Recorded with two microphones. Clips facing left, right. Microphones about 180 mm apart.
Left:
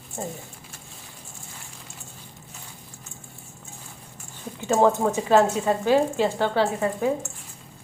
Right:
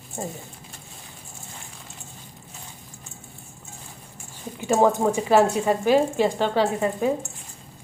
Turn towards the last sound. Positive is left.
turn(degrees=-15)  # may be behind; listen again after turning